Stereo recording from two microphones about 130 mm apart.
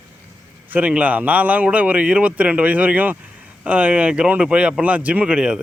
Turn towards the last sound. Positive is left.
turn(degrees=-5)  # may be behind; listen again after turning